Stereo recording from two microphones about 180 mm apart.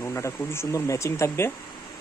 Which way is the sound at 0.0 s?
15° left (ahead or behind).